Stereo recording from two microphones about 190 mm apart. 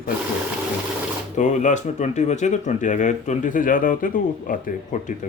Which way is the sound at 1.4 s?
40° left (ahead or behind).